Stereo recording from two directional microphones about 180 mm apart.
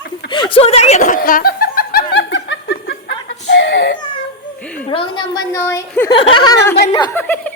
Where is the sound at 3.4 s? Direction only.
75° left (ahead or behind).